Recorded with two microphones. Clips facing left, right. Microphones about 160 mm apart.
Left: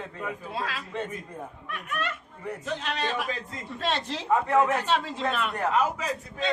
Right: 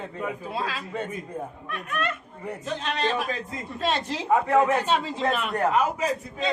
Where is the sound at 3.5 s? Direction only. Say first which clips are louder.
Right 3 dB; 5° right (ahead or behind).